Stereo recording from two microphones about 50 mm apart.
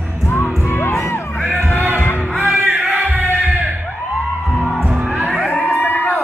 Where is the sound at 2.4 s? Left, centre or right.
Right.